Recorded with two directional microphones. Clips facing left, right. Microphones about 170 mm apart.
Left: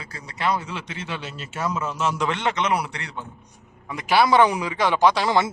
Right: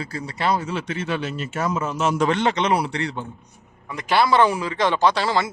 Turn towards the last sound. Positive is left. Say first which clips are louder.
# left 1 dB
turn(degrees=20)  # may be behind; listen again after turning